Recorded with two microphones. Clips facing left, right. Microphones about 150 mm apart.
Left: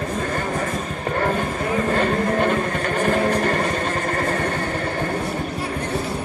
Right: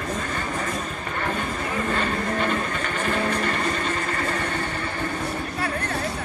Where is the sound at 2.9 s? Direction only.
40° left (ahead or behind).